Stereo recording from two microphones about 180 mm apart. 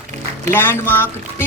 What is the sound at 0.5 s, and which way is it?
Speech, 15° left (ahead or behind).